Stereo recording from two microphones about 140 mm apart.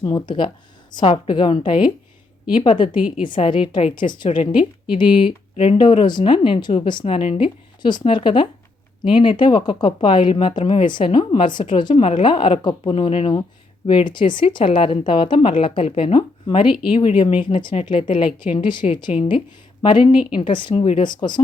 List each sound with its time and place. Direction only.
0.0 s speech: 30° left (ahead or behind)